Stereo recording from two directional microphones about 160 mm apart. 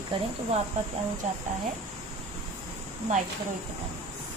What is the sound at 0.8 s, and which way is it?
Speech, 45° right (ahead or behind).